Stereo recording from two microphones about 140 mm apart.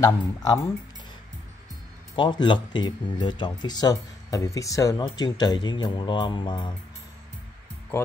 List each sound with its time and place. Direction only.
0.0 s speech: 25° left (ahead or behind)
2.1 s speech: 35° left (ahead or behind)